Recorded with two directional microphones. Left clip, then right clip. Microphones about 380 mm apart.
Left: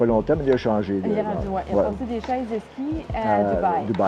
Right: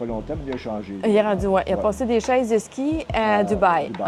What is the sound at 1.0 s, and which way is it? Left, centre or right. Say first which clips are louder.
Speech: right 6 dB; right.